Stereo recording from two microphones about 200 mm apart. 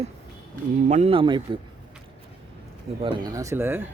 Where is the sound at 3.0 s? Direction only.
20° right (ahead or behind).